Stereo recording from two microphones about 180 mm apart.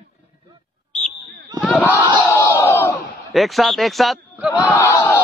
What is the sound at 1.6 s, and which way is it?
Battle cry, 5° left (ahead or behind).